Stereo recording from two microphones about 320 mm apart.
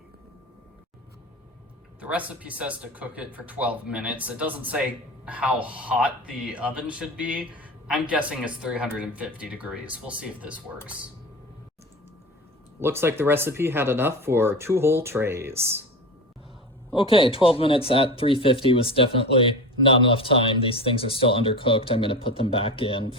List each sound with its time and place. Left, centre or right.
2.0 s speech: centre
12.8 s speech: centre
16.9 s speech: centre